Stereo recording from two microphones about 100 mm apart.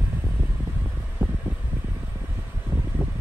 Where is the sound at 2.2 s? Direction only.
20° right (ahead or behind).